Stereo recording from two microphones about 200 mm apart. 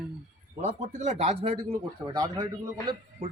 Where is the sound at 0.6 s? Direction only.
35° right (ahead or behind).